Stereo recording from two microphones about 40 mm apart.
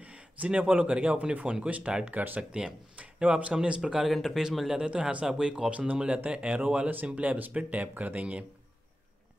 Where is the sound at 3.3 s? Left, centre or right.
Right.